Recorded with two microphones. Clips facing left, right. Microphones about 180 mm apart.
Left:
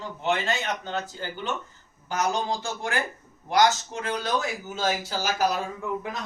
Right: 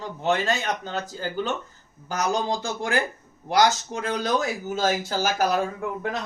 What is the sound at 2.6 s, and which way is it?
Speech, 40° right (ahead or behind).